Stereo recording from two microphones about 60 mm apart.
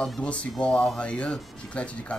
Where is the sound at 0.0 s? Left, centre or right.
Centre.